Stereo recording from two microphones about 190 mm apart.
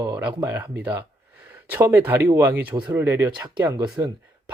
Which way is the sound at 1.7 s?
10° right (ahead or behind).